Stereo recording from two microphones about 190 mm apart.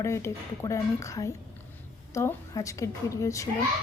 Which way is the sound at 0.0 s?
15° left (ahead or behind).